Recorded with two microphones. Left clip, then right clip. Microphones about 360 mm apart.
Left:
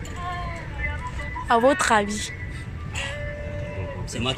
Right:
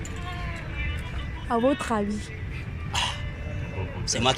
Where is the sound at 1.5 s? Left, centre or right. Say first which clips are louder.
Left 6 dB; left.